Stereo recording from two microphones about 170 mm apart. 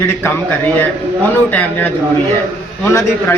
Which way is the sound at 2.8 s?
15° left (ahead or behind).